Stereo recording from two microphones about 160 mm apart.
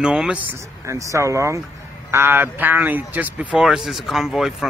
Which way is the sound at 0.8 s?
20° right (ahead or behind).